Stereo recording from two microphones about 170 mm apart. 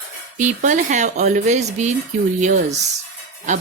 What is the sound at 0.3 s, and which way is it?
Speech, 45° right (ahead or behind).